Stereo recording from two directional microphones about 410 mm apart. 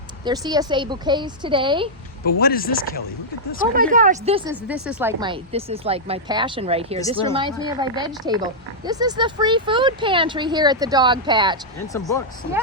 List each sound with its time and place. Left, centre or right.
0.3 s a woman's voice: centre
2.2 s speech: left
3.8 s a woman's voice: centre